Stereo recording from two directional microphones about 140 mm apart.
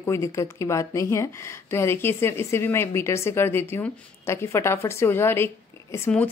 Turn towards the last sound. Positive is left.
turn(degrees=20)  # may be behind; listen again after turning